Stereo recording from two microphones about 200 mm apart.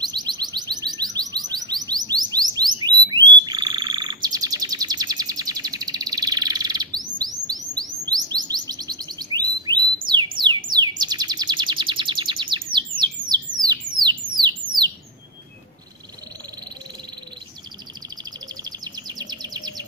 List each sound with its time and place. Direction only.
0.0 s music: 20° right (ahead or behind)
2.5 s frog: 20° right (ahead or behind)
7.4 s chirp: 20° right (ahead or behind)
8.1 s bird: 20° right (ahead or behind)
14.0 s a sound: 20° right (ahead or behind)
18.6 s chirp: 20° right (ahead or behind)